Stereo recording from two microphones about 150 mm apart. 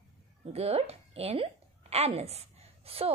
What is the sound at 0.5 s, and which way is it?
A woman's voice, 45° right (ahead or behind).